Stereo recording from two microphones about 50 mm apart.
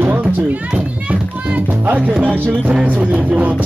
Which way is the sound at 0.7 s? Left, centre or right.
Right.